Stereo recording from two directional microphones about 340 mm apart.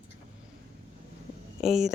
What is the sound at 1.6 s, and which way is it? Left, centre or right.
Speech, centre.